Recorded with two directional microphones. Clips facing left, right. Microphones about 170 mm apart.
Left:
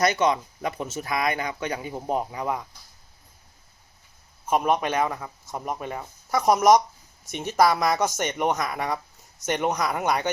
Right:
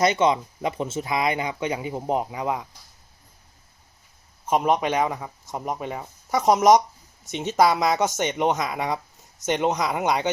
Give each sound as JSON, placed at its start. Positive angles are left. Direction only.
{"t": 0.0, "sound": "speech", "side_deg": -25}
{"t": 4.4, "sound": "speech", "side_deg": -15}